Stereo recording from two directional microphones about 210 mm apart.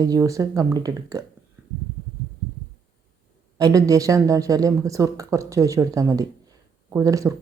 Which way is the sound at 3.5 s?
15° right (ahead or behind).